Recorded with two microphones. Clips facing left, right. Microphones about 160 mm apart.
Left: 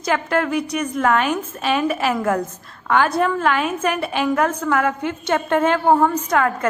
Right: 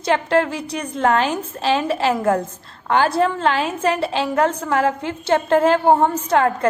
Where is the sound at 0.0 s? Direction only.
30° right (ahead or behind).